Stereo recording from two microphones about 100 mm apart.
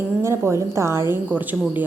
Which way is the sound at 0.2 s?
25° right (ahead or behind).